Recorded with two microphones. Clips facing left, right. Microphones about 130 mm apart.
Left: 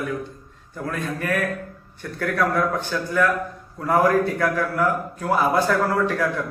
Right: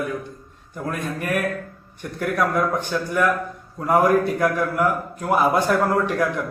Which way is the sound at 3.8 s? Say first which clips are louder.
Right 1 dB; 15° right (ahead or behind).